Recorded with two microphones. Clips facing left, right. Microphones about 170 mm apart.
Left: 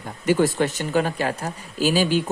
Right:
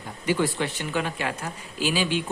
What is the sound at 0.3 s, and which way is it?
Speech, 45° left (ahead or behind).